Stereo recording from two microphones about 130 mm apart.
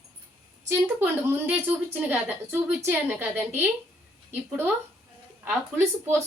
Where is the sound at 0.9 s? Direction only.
15° right (ahead or behind).